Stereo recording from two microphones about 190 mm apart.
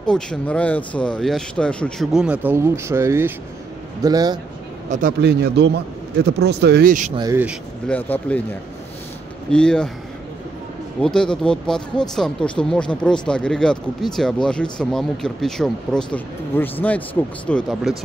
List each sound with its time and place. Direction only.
0.0 s speech: 5° left (ahead or behind); by 4.4 s 20° right (ahead or behind)
4.8 s a man's voice: 40° right (ahead or behind)
5.2 s speech: 60° right (ahead or behind)
7.9 s speech: 5° left (ahead or behind)
9.5 s speech: 5° left (ahead or behind)
11.0 s speech: 5° left (ahead or behind)